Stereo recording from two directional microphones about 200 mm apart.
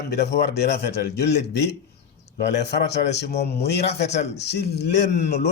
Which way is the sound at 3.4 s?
55° left (ahead or behind).